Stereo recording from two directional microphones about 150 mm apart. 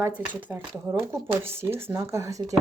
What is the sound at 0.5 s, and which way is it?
Speech, 15° right (ahead or behind).